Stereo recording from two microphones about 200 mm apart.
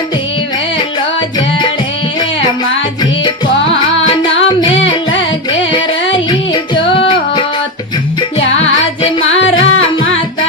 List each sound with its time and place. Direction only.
3.0 s music: 20° left (ahead or behind)
8.5 s music: 30° left (ahead or behind)
9.4 s music: 75° left (ahead or behind)